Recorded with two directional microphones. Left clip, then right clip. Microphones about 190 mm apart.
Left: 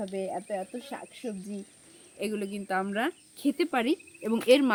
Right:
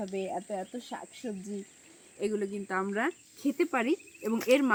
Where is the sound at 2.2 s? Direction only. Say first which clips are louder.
Right 1 dB; 40° left (ahead or behind); by 4.7 s 60° left (ahead or behind).